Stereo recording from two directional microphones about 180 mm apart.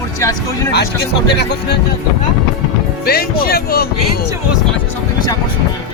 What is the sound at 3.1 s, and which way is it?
Speech, 60° left (ahead or behind).